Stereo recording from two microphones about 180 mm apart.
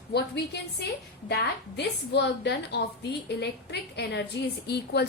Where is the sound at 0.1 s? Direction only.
65° left (ahead or behind).